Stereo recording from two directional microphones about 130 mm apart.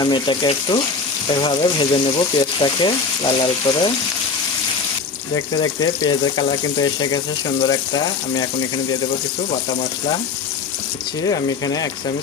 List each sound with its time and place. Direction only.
0.0 s speech: 35° left (ahead or behind)
5.3 s speech: 30° left (ahead or behind)
11.2 s speech: 30° left (ahead or behind)